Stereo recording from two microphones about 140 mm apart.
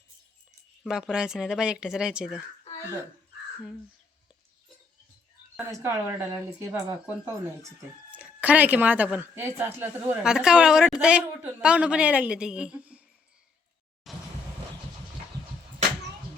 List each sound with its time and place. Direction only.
0.9 s speech: 5° right (ahead or behind)
5.5 s speech: 15° right (ahead or behind)
8.1 s speech: 10° right (ahead or behind)
14.1 s a sound: centre (ahead or behind)